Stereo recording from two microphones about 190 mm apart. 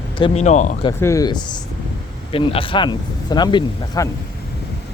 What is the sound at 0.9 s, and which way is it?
Speech, 15° left (ahead or behind).